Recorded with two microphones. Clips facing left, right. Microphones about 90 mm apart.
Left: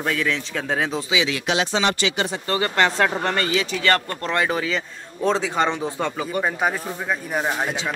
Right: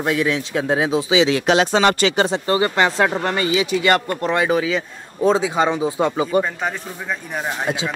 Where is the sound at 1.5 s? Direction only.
50° right (ahead or behind).